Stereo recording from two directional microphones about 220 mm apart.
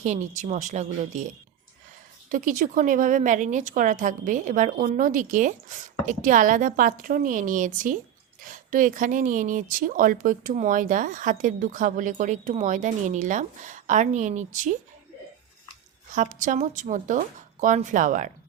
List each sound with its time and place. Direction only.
0.0 s a woman's voice: 35° right (ahead or behind)
2.3 s a woman's voice: 35° right (ahead or behind)
16.1 s a woman's voice: 35° right (ahead or behind)